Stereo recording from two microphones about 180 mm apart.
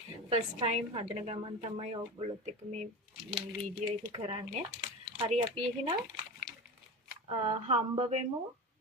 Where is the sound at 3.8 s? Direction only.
30° right (ahead or behind).